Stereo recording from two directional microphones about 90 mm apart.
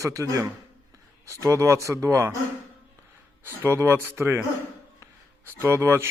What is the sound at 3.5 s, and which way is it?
Speech, 30° right (ahead or behind).